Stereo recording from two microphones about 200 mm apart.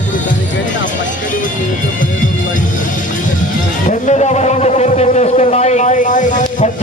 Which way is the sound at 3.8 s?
35° left (ahead or behind).